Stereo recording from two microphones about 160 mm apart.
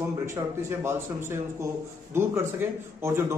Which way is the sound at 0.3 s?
15° right (ahead or behind).